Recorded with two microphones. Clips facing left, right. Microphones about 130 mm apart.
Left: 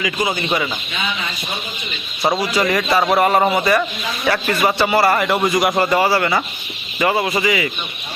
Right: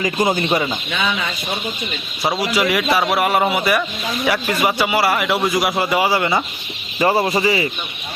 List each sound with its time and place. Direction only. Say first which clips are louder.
0.0 s speech: right 3 dB; 45° right (ahead or behind)
2.4 s a man's voice: even; 10° right (ahead or behind)
7.0 s speech: right 1 dB; 35° right (ahead or behind)